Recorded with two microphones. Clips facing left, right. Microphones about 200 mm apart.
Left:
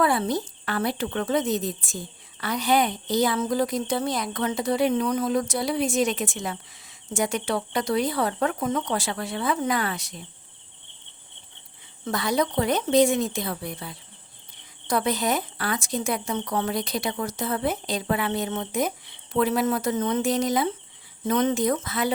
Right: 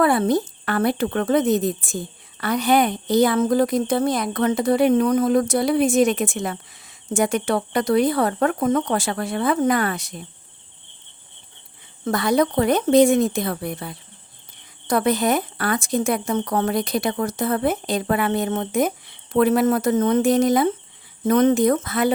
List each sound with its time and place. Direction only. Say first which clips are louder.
0.0 s speech: right 5 dB; 55° right (ahead or behind)
12.0 s speech: right 6 dB; 55° right (ahead or behind)